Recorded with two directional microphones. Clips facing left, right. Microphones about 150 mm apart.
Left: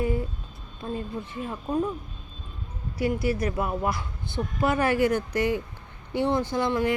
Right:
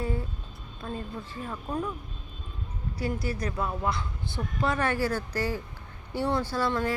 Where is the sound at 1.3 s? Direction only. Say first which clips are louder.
Left 5 dB; 20° left (ahead or behind).